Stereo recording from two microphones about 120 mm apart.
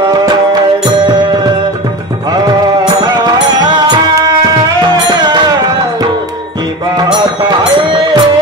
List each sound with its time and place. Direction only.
0.8 s music: 40° right (ahead or behind)
3.0 s music: 35° right (ahead or behind)
7.0 s music: 35° right (ahead or behind)